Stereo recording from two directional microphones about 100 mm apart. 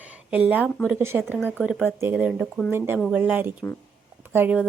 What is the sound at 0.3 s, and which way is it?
Speech, 15° right (ahead or behind).